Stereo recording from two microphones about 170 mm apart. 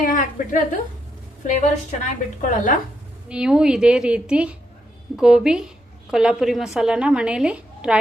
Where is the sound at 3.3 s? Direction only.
5° right (ahead or behind).